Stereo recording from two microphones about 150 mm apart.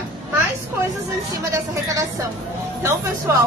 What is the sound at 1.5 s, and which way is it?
Speech, 20° right (ahead or behind).